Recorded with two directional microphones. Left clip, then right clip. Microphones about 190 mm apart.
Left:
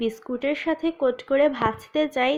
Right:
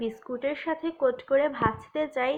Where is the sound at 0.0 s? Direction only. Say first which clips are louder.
Left 4 dB; 45° left (ahead or behind).